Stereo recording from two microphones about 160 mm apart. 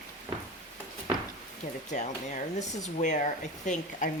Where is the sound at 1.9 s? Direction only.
50° left (ahead or behind).